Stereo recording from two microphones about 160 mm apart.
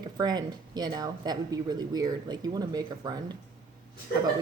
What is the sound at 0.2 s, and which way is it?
Speech, 25° right (ahead or behind).